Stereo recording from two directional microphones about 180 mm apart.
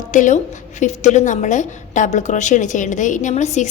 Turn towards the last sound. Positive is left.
turn(degrees=40)  # may be behind; listen again after turning